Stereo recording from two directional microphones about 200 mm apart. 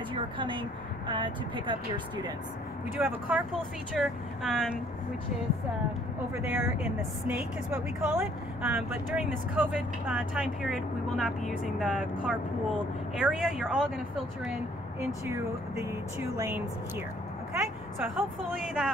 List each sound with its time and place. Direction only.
0.1 s speech: 25° right (ahead or behind)
3.0 s a woman's voice: 10° right (ahead or behind)
6.3 s a woman's voice: 10° right (ahead or behind)
15.2 s speech: 15° right (ahead or behind)
18.1 s a woman's voice: centre (ahead or behind)